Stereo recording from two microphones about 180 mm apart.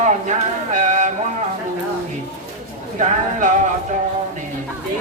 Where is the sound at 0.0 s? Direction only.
45° right (ahead or behind).